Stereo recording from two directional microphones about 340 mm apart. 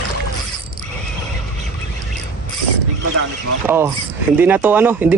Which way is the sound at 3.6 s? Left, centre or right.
Centre.